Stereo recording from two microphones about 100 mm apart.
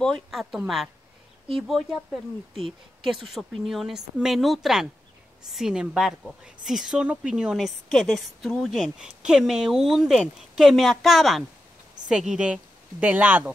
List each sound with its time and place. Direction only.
0.0 s speech: 5° left (ahead or behind)
3.0 s a woman's voice: centre (ahead or behind)